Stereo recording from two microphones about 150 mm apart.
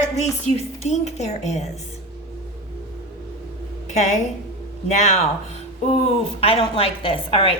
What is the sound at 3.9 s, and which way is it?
A woman's voice, 50° left (ahead or behind).